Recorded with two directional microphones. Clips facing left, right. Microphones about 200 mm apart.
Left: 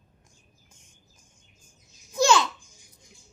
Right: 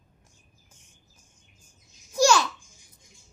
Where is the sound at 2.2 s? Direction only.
20° left (ahead or behind).